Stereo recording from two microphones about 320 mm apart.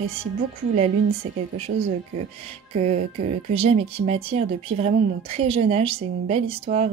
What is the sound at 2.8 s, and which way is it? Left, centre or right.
A woman's voice, centre.